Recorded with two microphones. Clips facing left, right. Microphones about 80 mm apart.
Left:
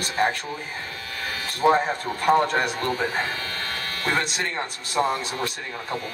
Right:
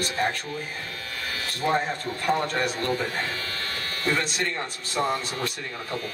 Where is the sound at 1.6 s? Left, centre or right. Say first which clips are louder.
Left 6 dB; left.